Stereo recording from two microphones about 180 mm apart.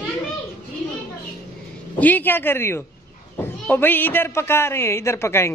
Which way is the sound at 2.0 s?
10° left (ahead or behind).